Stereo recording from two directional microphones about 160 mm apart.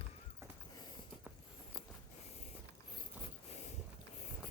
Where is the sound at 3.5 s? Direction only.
45° left (ahead or behind).